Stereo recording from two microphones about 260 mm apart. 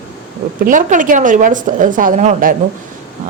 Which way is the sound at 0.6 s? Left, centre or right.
Right.